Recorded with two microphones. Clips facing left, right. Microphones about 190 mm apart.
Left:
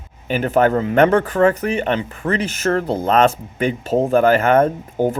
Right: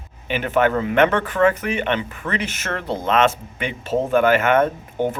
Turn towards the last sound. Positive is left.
turn(degrees=35)  # may be behind; listen again after turning